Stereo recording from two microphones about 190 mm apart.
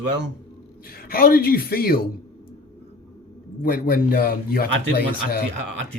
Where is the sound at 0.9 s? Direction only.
50° left (ahead or behind).